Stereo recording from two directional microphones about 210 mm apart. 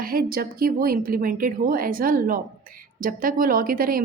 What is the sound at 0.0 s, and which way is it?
A woman's voice, 45° right (ahead or behind).